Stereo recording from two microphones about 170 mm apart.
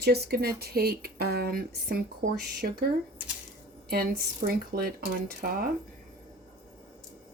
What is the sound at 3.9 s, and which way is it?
Speech, 60° right (ahead or behind).